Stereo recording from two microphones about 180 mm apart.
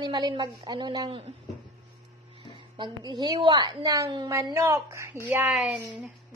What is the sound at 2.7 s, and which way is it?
A woman's voice, 25° right (ahead or behind).